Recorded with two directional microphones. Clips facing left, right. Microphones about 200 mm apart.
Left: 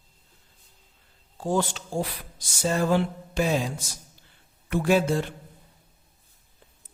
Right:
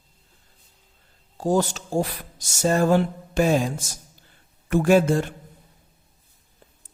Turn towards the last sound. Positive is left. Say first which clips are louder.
# right 4 dB
turn(degrees=-50)  # may be behind; listen again after turning